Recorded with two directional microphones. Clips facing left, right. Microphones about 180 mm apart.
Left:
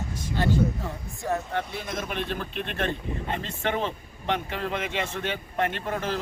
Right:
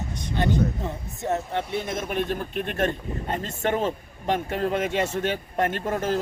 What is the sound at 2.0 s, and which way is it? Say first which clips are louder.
Speech: right 4 dB; 45° right (ahead or behind).